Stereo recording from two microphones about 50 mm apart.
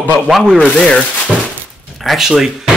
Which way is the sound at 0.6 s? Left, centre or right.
Left.